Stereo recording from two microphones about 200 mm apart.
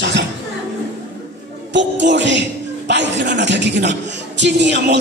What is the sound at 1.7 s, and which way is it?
Music, 60° right (ahead or behind).